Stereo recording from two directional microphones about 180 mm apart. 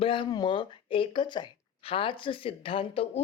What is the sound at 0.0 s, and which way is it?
Speech, 30° left (ahead or behind).